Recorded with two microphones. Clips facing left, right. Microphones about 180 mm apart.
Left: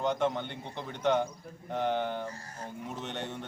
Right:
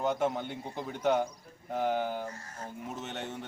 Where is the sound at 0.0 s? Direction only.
5° right (ahead or behind).